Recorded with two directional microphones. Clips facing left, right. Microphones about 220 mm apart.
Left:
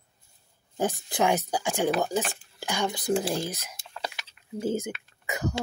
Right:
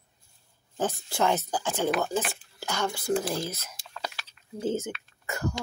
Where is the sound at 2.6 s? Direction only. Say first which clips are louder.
Left 1 dB; 15° left (ahead or behind).